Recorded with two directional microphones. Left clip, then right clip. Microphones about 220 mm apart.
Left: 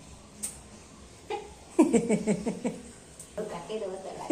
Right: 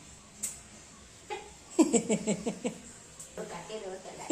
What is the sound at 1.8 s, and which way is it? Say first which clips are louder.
Speech: left 3 dB; 10° right (ahead or behind).